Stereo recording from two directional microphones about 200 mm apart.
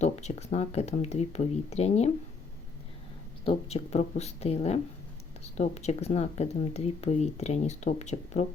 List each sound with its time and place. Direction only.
0.0 s speech: 35° left (ahead or behind)
3.4 s speech: 30° left (ahead or behind)